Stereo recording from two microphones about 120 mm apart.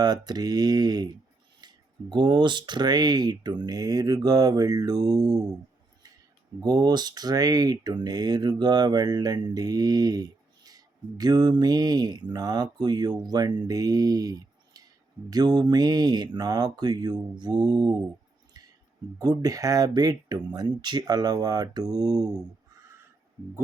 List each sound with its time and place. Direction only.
0.0 s speech: 35° right (ahead or behind)
6.6 s speech: 35° right (ahead or behind)
19.2 s speech: 35° right (ahead or behind)